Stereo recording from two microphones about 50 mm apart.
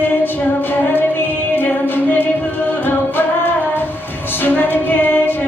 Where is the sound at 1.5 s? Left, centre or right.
Left.